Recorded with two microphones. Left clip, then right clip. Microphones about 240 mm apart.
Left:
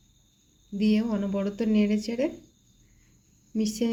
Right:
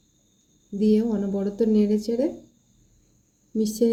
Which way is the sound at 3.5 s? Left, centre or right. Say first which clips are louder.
Right 6 dB; left.